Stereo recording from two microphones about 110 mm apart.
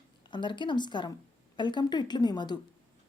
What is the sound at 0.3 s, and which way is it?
A woman's voice, 45° left (ahead or behind).